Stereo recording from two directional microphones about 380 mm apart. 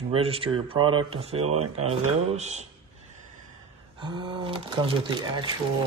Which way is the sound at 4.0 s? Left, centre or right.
Centre.